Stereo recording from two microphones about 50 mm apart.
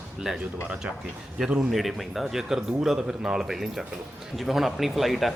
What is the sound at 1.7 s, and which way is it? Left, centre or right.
A man's voice, centre.